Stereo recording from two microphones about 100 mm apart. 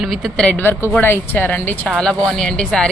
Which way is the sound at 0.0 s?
Centre (ahead or behind).